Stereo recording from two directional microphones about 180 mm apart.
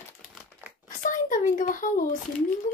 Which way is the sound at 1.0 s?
45° left (ahead or behind).